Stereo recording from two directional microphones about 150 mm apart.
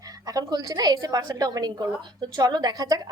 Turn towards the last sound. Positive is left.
turn(degrees=-25)  # may be behind; listen again after turning